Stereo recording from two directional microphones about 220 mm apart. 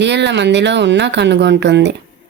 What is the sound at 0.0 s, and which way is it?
Speech, 50° right (ahead or behind).